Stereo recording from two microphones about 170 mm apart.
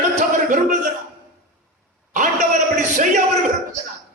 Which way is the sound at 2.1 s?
50° right (ahead or behind).